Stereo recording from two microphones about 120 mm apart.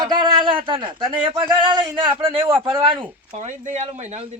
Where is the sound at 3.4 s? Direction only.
85° right; by 4.2 s 70° right (ahead or behind).